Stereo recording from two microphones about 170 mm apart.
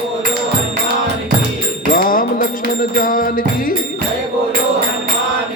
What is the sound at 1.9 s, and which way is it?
Music, 55° left (ahead or behind).